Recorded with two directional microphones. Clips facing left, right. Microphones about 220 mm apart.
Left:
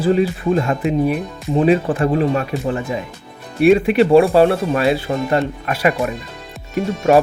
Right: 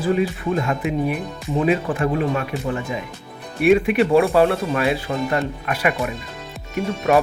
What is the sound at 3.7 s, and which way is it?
Speech, 30° left (ahead or behind).